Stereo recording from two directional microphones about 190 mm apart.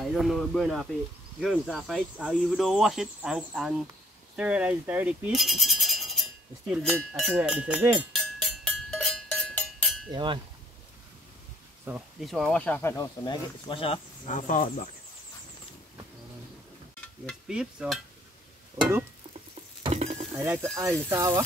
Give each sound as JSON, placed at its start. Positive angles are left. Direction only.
{"t": 0.0, "sound": "speech", "side_deg": 0}
{"t": 7.3, "sound": "cowbell", "side_deg": -5}
{"t": 10.1, "sound": "speech", "side_deg": -25}
{"t": 11.8, "sound": "speech", "side_deg": -5}
{"t": 14.3, "sound": "speech", "side_deg": 40}
{"t": 17.3, "sound": "speech", "side_deg": -5}
{"t": 18.8, "sound": "speech", "side_deg": -15}
{"t": 19.8, "sound": "a sound", "side_deg": -35}
{"t": 20.3, "sound": "speech", "side_deg": -15}